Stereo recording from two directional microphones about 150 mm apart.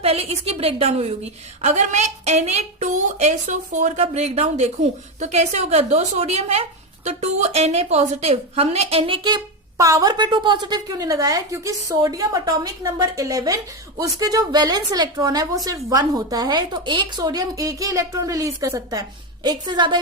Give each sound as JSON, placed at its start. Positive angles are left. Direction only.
{"t": 0.0, "sound": "a woman's voice", "side_deg": -40}